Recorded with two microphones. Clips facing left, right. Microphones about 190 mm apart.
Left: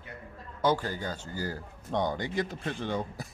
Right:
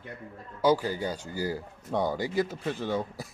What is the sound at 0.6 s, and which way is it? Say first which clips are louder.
Speech: right 3 dB; 10° right (ahead or behind).